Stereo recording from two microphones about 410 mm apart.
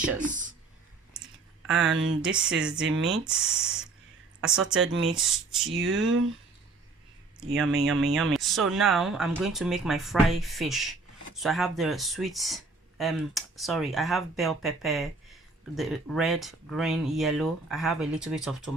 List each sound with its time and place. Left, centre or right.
0.2 s a sound: centre
1.7 s speech: right
2.2 s speech: centre
4.8 s speech: right
5.0 s speech: centre
5.6 s speech: right
7.3 s speech: centre